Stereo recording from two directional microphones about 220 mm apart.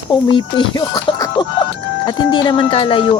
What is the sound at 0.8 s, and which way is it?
Music, 20° left (ahead or behind).